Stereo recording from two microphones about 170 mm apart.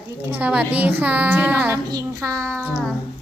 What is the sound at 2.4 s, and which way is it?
Child singing, 10° left (ahead or behind).